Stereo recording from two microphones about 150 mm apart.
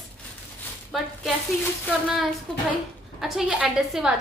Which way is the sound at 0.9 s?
Centre (ahead or behind).